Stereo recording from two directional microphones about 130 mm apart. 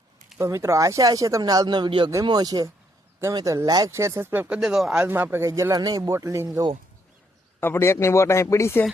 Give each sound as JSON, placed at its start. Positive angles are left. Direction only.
{"t": 0.3, "sound": "speech", "side_deg": -25}
{"t": 5.0, "sound": "speech", "side_deg": -15}
{"t": 7.6, "sound": "a man's voice", "side_deg": 20}